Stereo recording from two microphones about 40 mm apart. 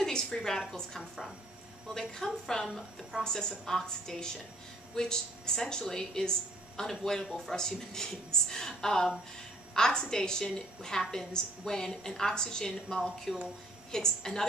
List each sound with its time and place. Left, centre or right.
0.0 s a woman's voice: centre